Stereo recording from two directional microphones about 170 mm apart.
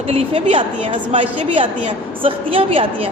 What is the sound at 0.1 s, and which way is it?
A man's voice, 35° right (ahead or behind).